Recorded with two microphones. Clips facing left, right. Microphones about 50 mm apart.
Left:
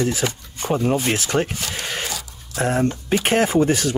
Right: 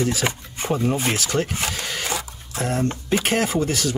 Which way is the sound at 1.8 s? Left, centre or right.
Left.